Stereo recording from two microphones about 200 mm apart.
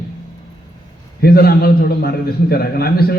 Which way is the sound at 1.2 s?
50° left (ahead or behind).